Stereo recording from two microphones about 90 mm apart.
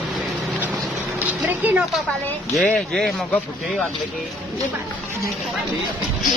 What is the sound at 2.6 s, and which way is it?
Speech, 10° left (ahead or behind).